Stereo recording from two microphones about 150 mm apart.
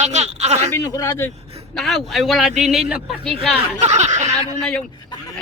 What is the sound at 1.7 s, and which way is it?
Speech, centre (ahead or behind).